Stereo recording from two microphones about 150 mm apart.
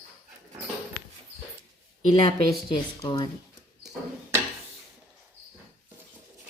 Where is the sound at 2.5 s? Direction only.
25° left (ahead or behind).